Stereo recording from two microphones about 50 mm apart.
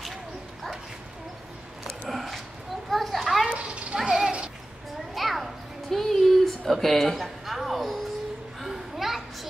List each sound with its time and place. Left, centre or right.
2.0 s dog: centre
2.9 s children playing: centre
3.4 s children playing: right
3.9 s a sound: centre
5.1 s a sound: centre
8.5 s children playing: centre